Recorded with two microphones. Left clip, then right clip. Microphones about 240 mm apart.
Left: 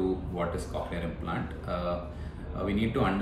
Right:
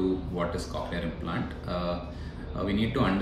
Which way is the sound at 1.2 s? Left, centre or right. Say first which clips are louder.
Right 1 dB; centre.